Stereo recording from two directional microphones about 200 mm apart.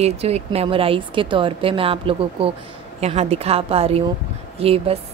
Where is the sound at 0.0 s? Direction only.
30° right (ahead or behind).